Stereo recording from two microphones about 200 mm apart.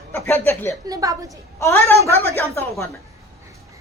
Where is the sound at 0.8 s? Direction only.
15° right (ahead or behind).